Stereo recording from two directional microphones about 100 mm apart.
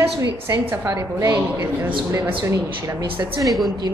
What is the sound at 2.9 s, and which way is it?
Speech, 50° right (ahead or behind).